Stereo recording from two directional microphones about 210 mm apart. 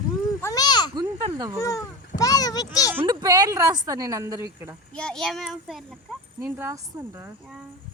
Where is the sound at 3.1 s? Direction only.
20° right (ahead or behind).